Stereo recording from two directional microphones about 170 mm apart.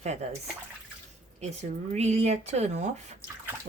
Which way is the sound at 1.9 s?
40° right (ahead or behind).